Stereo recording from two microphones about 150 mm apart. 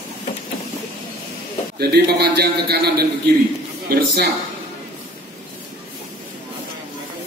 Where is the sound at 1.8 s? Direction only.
90° right.